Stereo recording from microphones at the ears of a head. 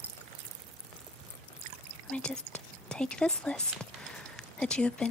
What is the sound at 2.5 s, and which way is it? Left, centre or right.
Speech, centre.